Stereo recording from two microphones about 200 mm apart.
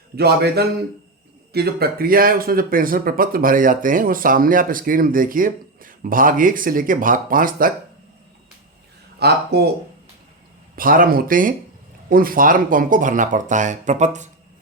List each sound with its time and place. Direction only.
0.2 s speech: 55° right (ahead or behind)
9.1 s speech: 55° right (ahead or behind)
10.8 s speech: 45° right (ahead or behind)